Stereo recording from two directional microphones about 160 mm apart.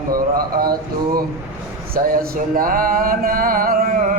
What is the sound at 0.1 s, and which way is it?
Speech, 65° right (ahead or behind).